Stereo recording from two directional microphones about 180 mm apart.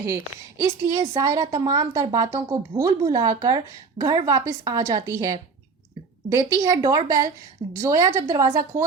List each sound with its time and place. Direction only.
0.6 s a woman's voice: 20° right (ahead or behind)